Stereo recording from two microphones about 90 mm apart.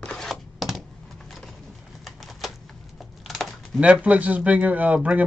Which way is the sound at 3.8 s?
15° right (ahead or behind).